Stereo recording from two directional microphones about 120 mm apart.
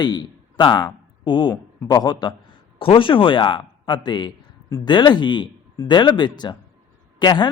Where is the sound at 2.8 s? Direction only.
45° left (ahead or behind).